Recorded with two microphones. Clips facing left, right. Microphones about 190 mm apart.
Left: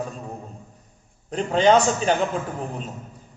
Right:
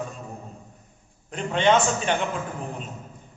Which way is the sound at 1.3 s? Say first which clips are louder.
Left 3 dB; 35° left (ahead or behind).